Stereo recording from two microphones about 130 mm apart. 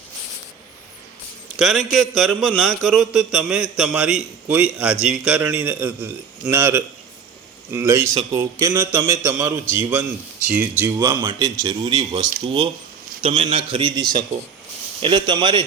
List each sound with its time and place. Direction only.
1.5 s a man's voice: 5° right (ahead or behind); by 9.6 s 30° right (ahead or behind)
9.7 s a man's voice: 15° right (ahead or behind)
10.9 s speech: 30° right (ahead or behind)
15.0 s speech: 40° right (ahead or behind)